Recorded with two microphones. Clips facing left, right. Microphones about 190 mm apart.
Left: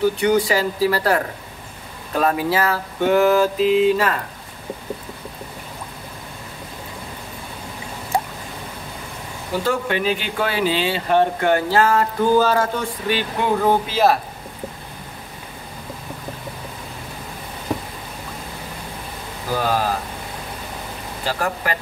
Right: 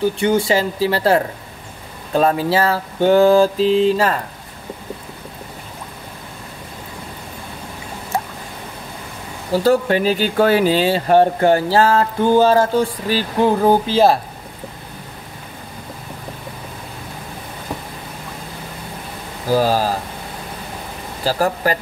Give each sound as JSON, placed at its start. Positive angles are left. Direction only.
{"t": 0.2, "sound": "speech", "side_deg": -25}
{"t": 8.1, "sound": "a sound", "side_deg": 10}
{"t": 9.6, "sound": "speech", "side_deg": -40}
{"t": 19.5, "sound": "speech", "side_deg": -30}
{"t": 21.2, "sound": "speech", "side_deg": -35}